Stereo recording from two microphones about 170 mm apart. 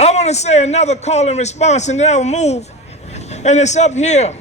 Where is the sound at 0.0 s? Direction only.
40° left (ahead or behind).